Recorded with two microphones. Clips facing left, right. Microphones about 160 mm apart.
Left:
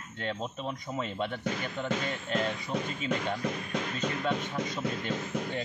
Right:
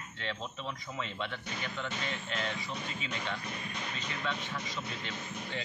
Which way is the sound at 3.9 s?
45° left (ahead or behind).